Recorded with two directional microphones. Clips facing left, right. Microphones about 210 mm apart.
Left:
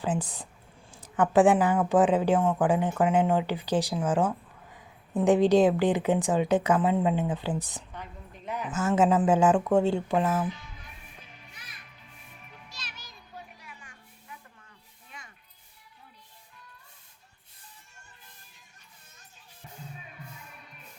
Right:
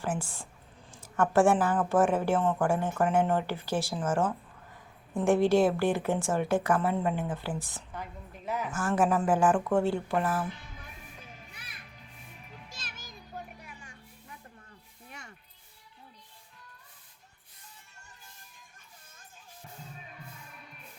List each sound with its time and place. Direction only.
0.0 s a woman's voice: 20° left (ahead or behind)
8.4 s speech: 5° right (ahead or behind)
8.7 s speech: 20° left (ahead or behind)
12.6 s children playing: 50° right (ahead or behind)